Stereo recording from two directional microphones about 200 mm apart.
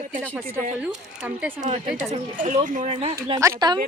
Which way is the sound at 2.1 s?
35° right (ahead or behind).